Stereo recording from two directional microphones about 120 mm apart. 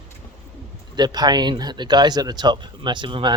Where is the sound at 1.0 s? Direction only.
35° right (ahead or behind).